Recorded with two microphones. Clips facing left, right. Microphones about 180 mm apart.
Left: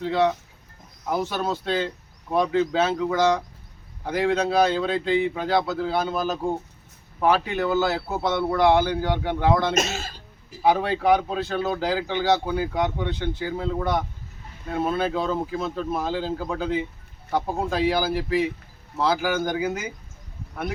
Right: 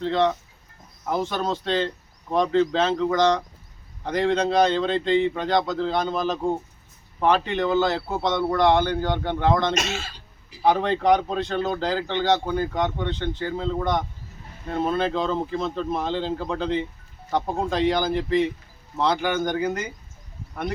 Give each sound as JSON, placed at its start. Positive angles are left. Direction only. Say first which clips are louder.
{"t": 0.0, "sound": "speech", "louder": "even", "side_deg": 10}
{"t": 9.7, "sound": "throat clearing", "louder": "left 2 dB", "side_deg": 45}
{"t": 10.6, "sound": "speech", "louder": "even", "side_deg": 5}